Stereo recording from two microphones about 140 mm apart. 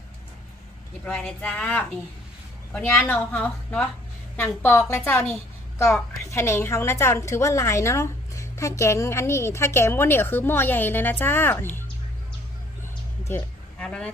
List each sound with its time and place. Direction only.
1.0 s a woman's voice: 5° left (ahead or behind)
13.2 s a sound: 15° left (ahead or behind)
13.8 s a woman's voice: 5° left (ahead or behind)